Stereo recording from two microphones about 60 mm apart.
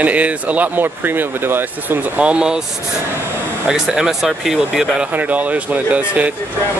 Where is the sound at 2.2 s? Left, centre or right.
Centre.